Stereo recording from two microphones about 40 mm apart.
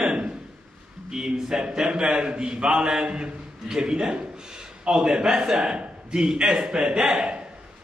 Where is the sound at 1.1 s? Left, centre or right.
Centre.